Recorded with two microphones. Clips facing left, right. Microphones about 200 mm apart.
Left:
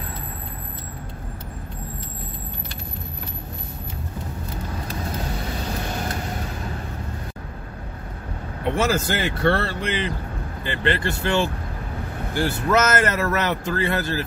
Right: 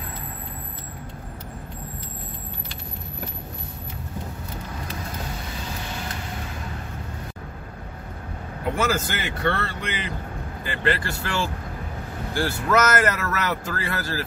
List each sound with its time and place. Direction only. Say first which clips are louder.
5.9 s vehicle: left 5 dB; 45° left (ahead or behind)
8.7 s a man's voice: left 3 dB; 30° left (ahead or behind)